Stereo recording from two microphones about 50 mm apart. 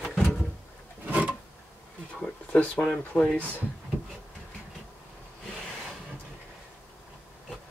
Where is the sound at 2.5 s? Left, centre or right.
Left.